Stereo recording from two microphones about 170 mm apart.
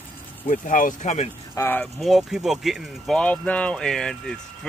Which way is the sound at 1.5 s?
15° left (ahead or behind).